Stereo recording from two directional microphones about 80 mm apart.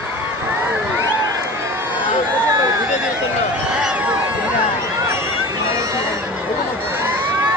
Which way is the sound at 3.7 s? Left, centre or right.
Centre.